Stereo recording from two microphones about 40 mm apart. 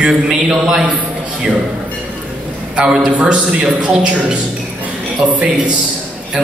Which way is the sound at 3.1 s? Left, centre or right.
Right.